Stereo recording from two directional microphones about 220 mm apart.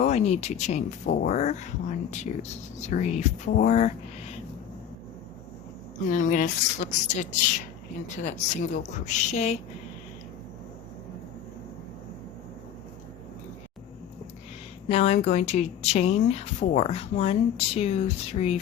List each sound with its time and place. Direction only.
0.0 s speech: 30° left (ahead or behind)
6.1 s speech: 35° left (ahead or behind)
14.8 s speech: 30° left (ahead or behind)